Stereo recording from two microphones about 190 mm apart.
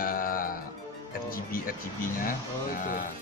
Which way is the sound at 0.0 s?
50° left (ahead or behind).